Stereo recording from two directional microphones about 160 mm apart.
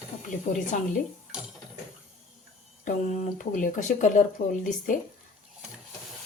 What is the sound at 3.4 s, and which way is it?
Speech, 55° left (ahead or behind).